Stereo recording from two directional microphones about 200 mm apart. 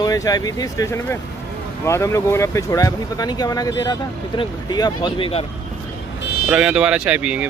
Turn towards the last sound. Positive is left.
turn(degrees=-5)  # may be behind; listen again after turning